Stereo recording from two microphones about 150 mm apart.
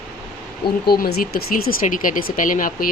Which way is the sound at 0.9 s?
90° left.